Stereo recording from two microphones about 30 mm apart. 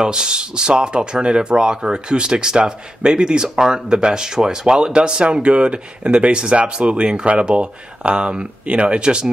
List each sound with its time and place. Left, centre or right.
0.0 s speech: right